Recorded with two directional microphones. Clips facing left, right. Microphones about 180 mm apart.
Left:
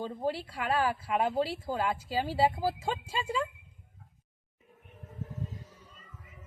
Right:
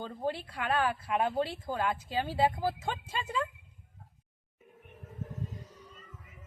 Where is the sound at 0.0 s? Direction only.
5° left (ahead or behind).